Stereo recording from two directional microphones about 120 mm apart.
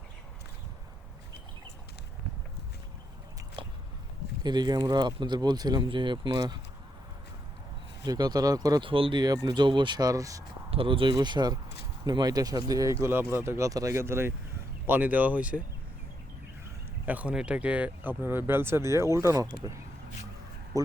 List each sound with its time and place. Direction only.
3.6 s biting: 45° right (ahead or behind)
4.4 s speech: 35° right (ahead or behind)
8.0 s speech: 35° right (ahead or behind)
8.9 s speech: 45° right (ahead or behind)
9.2 s speech: 35° right (ahead or behind)
10.7 s speech: 50° right (ahead or behind); by 15.6 s 10° right (ahead or behind)
17.1 s speech: 10° right (ahead or behind)
20.7 s speech: 30° right (ahead or behind)